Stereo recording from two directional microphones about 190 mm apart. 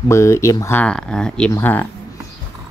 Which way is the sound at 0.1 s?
15° left (ahead or behind).